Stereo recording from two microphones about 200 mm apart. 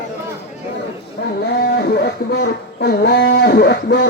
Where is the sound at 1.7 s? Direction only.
55° left (ahead or behind).